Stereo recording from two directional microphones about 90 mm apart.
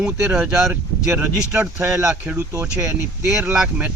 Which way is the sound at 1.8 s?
30° right (ahead or behind).